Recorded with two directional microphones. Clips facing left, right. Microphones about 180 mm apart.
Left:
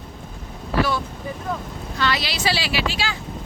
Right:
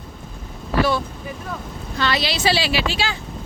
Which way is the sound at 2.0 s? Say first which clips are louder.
Right 2 dB; 30° right (ahead or behind).